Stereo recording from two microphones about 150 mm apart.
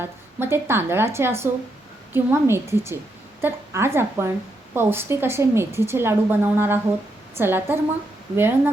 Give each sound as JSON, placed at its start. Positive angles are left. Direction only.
{"t": 0.0, "sound": "a woman's voice", "side_deg": -15}